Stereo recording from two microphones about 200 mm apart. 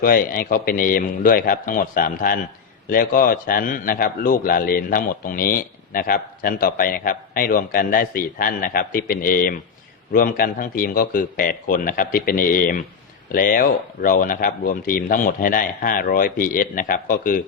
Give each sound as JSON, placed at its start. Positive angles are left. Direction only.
{"t": 0.0, "sound": "a man's voice", "side_deg": 45}